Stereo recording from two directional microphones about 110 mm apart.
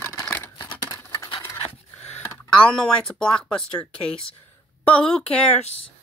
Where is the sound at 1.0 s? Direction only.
30° left (ahead or behind).